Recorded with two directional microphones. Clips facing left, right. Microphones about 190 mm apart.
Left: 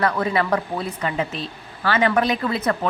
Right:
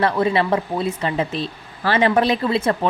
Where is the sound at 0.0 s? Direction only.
25° right (ahead or behind).